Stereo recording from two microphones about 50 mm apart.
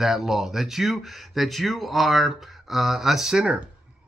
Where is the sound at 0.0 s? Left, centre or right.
Centre.